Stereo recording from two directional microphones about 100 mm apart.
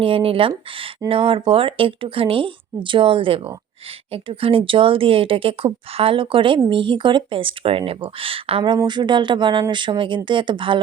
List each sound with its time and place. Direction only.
0.0 s speech: 65° right (ahead or behind)